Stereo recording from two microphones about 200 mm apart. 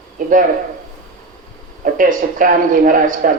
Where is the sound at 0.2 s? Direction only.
40° right (ahead or behind).